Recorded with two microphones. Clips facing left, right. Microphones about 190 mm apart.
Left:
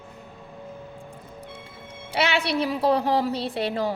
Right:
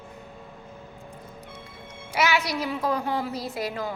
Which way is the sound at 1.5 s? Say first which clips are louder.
Left 1 dB; 30° left (ahead or behind).